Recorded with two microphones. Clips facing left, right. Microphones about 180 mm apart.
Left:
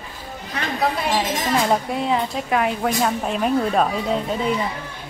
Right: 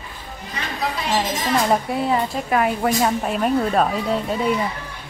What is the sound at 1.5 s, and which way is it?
A woman's voice, centre (ahead or behind).